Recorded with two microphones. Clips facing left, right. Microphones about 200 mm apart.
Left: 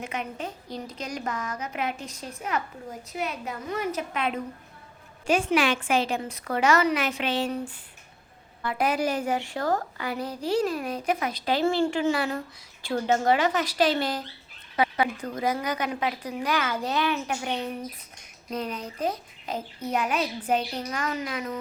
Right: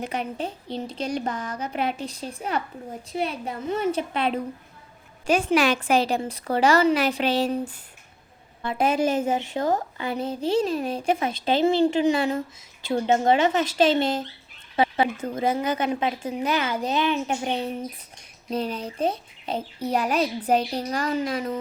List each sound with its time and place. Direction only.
0.0 s a woman's voice: 35° right (ahead or behind)
8.6 s a woman's voice: 25° right (ahead or behind)